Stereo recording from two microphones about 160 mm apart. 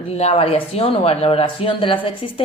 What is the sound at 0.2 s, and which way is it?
Speech, 40° left (ahead or behind).